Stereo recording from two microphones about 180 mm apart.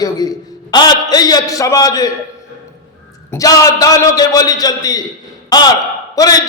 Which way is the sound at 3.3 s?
20° left (ahead or behind).